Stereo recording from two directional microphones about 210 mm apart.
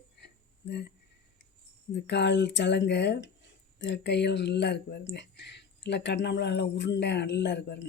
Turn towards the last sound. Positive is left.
turn(degrees=55)  # may be behind; listen again after turning